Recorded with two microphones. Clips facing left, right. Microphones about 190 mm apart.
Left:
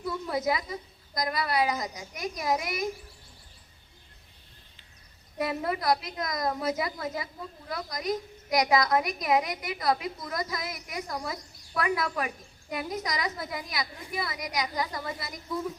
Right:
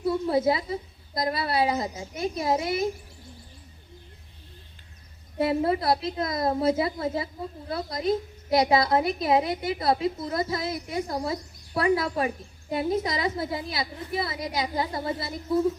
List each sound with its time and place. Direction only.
0.0 s a woman's voice: 30° right (ahead or behind)
5.4 s a woman's voice: 30° right (ahead or behind)